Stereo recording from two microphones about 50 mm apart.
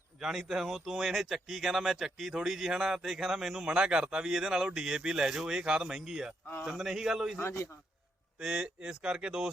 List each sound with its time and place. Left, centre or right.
0.2 s speech: centre
7.3 s a man's voice: left
8.4 s speech: centre